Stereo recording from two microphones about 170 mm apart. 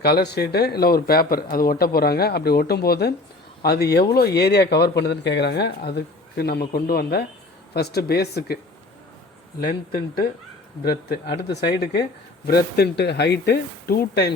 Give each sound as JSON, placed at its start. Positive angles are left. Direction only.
{"t": 0.0, "sound": "speech", "side_deg": 70}
{"t": 9.6, "sound": "speech", "side_deg": 60}